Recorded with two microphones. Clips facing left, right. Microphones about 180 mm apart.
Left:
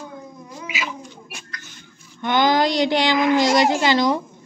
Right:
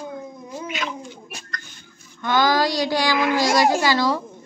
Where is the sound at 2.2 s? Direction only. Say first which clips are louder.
Left 1 dB; 20° left (ahead or behind).